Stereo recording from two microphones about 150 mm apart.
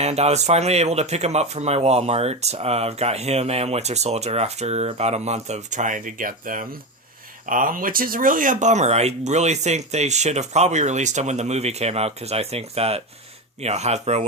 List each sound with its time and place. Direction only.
0.0 s speech: 45° right (ahead or behind)